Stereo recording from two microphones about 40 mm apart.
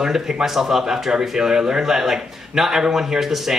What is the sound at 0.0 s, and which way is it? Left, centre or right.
Speech, centre.